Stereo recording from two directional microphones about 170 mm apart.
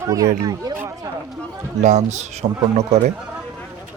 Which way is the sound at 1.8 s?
45° right (ahead or behind).